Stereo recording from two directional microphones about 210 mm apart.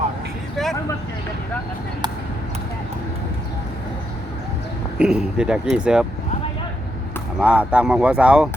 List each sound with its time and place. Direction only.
0.5 s a sound: centre (ahead or behind)
4.9 s speech: 5° right (ahead or behind)
7.3 s speech: 5° right (ahead or behind)